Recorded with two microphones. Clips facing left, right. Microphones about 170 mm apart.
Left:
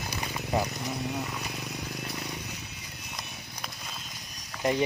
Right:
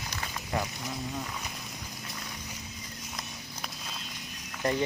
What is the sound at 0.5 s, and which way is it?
Speech, 20° left (ahead or behind).